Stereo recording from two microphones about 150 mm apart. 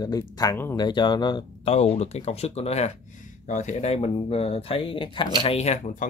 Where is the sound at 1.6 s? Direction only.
45° left (ahead or behind).